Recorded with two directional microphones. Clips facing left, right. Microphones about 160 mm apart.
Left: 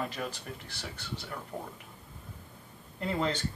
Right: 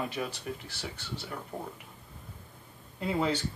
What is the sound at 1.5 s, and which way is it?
Speech, 15° right (ahead or behind).